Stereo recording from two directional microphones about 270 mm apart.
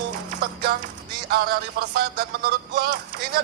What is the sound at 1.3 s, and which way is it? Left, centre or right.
Speech, right.